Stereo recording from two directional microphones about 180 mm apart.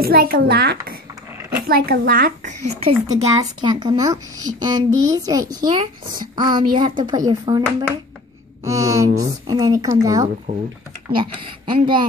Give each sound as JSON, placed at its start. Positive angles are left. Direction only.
{"t": 0.0, "sound": "a child's voice", "side_deg": -60}
{"t": 3.3, "sound": "a child's voice", "side_deg": -20}
{"t": 8.6, "sound": "a woman's voice", "side_deg": -15}